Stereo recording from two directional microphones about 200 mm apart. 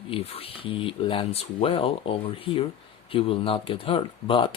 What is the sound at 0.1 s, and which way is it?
Speech, 30° left (ahead or behind).